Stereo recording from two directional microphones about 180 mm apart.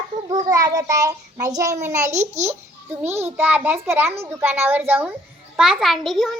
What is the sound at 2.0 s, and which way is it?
Speech, 40° right (ahead or behind).